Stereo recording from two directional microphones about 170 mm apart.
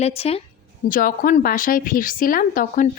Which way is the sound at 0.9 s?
55° left (ahead or behind).